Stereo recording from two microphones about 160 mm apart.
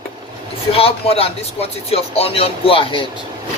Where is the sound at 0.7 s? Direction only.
40° left (ahead or behind).